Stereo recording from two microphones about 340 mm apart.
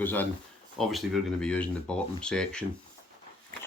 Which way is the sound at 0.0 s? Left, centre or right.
Centre.